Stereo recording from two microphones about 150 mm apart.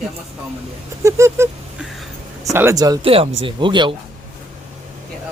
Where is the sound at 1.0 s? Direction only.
20° right (ahead or behind).